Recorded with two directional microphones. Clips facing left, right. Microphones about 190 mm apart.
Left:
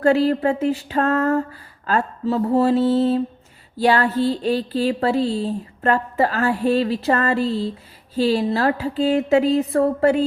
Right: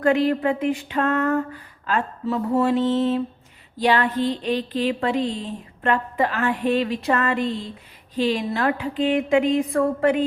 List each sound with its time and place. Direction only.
0.0 s speech: 35° left (ahead or behind)